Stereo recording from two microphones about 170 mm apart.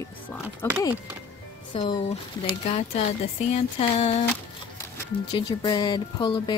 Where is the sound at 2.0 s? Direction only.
35° left (ahead or behind).